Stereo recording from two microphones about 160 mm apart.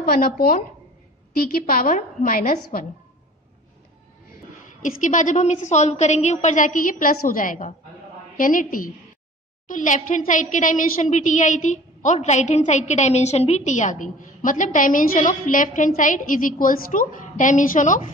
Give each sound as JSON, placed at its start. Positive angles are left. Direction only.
{"t": 0.0, "sound": "a woman's voice", "side_deg": 65}
{"t": 5.0, "sound": "a woman's voice", "side_deg": 50}